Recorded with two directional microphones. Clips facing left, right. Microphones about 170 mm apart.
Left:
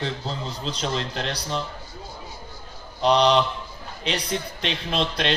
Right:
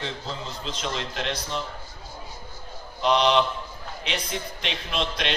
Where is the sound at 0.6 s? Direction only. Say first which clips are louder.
Left 4 dB; 35° left (ahead or behind).